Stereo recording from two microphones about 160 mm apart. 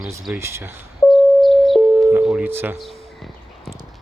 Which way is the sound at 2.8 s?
Centre (ahead or behind).